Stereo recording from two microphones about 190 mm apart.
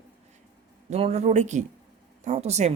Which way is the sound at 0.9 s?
35° right (ahead or behind).